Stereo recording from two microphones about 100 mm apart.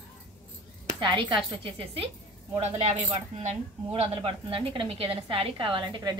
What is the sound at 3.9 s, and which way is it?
A woman's voice, 70° right (ahead or behind).